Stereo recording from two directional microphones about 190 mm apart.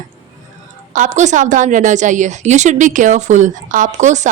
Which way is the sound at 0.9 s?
40° right (ahead or behind).